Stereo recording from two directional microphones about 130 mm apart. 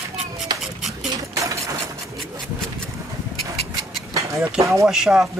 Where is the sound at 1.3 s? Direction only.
25° right (ahead or behind).